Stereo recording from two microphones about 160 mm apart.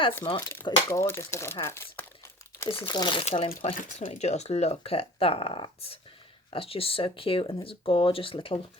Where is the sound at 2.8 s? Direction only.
30° left (ahead or behind).